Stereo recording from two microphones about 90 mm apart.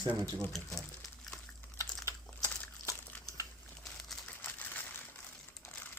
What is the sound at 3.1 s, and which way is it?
Crumpling, 15° left (ahead or behind).